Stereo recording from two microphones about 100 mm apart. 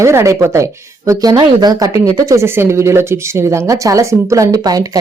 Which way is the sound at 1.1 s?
40° right (ahead or behind).